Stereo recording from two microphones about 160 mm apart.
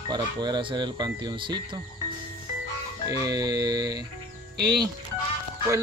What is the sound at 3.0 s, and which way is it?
Speech, 25° right (ahead or behind).